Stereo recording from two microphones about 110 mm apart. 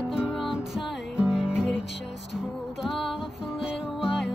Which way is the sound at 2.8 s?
Centre (ahead or behind).